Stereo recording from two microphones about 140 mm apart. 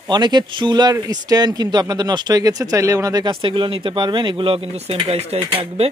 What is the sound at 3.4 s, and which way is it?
Speech, 40° right (ahead or behind).